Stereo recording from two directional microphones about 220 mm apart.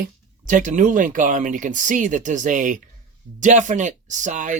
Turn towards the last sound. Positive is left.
turn(degrees=-35)  # may be behind; listen again after turning